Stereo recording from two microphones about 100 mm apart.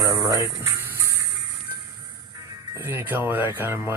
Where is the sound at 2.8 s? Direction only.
25° right (ahead or behind).